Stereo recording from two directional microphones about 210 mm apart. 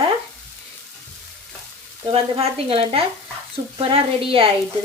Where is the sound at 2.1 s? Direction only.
25° right (ahead or behind).